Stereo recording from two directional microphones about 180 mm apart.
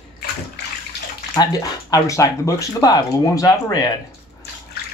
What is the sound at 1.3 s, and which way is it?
Speech, 20° left (ahead or behind).